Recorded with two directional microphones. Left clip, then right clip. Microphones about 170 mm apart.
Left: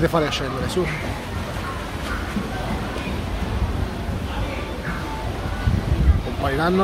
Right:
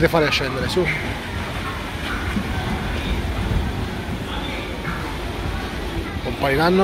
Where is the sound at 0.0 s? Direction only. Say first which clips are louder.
Right 3 dB; 5° left (ahead or behind).